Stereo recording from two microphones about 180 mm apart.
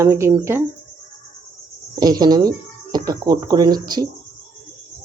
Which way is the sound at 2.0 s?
20° right (ahead or behind).